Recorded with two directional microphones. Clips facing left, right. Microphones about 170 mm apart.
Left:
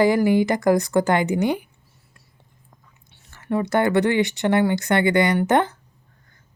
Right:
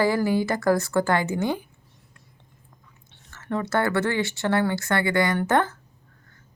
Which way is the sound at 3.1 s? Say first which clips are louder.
Left 5 dB; 10° left (ahead or behind).